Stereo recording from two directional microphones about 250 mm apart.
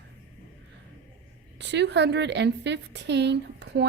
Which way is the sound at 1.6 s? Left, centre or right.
Right.